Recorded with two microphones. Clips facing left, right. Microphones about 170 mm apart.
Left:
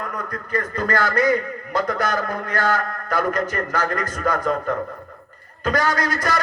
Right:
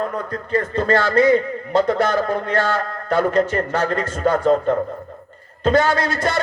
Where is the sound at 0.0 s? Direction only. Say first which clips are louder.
Right 5 dB; 25° right (ahead or behind).